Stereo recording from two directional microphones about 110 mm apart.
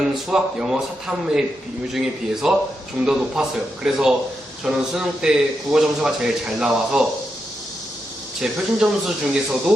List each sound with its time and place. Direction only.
0.0 s a man's voice: 5° right (ahead or behind)
8.4 s speech: 5° right (ahead or behind)